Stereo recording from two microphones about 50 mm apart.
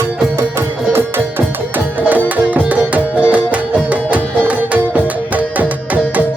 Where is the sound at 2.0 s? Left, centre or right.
Right.